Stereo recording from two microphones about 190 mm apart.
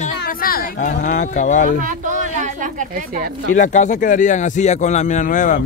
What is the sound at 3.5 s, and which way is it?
Speech, 40° left (ahead or behind).